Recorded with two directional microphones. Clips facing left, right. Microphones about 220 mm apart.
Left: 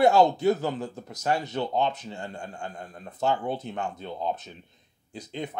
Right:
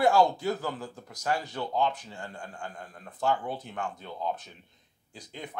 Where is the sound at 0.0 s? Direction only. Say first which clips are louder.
Left 4 dB; 20° left (ahead or behind).